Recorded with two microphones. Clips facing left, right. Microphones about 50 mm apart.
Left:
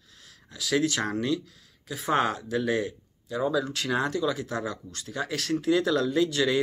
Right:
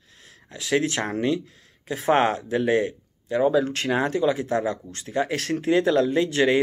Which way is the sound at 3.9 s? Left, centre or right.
Right.